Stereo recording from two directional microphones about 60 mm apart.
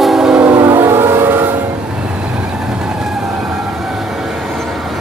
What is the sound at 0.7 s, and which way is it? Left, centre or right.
Siren, right.